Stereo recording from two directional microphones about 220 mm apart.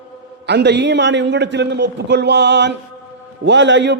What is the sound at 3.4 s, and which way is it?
Speech, 55° right (ahead or behind).